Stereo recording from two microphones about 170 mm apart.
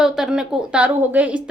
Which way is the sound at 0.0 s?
5° right (ahead or behind).